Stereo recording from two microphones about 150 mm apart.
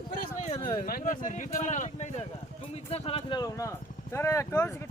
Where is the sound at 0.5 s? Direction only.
30° left (ahead or behind).